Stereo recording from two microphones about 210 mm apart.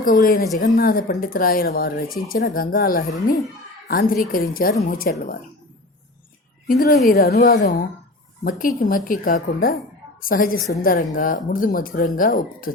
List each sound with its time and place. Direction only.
0.0 s a woman's voice: 40° left (ahead or behind)
6.7 s a woman's voice: 45° left (ahead or behind)